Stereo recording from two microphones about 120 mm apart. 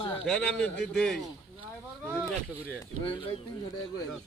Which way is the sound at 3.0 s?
45° left (ahead or behind).